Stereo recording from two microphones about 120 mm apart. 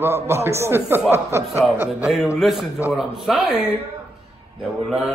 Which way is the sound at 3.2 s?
Centre (ahead or behind).